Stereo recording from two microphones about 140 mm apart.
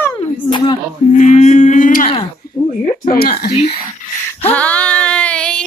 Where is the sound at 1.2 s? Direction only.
55° left (ahead or behind).